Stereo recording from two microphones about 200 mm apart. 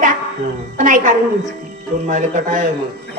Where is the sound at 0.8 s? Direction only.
40° right (ahead or behind).